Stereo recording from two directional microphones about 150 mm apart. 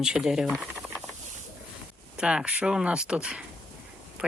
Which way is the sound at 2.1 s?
5° right (ahead or behind).